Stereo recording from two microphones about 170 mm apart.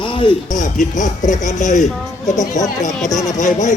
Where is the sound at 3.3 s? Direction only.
45° left (ahead or behind).